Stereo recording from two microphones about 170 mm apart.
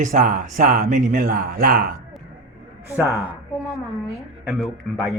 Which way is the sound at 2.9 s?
10° right (ahead or behind).